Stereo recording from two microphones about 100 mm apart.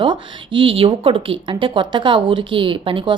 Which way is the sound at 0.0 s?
55° right (ahead or behind).